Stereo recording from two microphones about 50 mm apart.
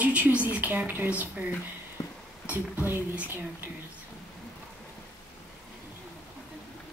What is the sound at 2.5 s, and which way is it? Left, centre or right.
Speech, right.